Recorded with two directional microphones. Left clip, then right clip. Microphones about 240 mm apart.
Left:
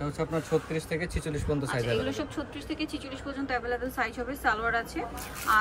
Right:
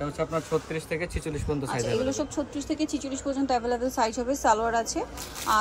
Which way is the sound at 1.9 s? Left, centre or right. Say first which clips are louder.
Right 3 dB; centre.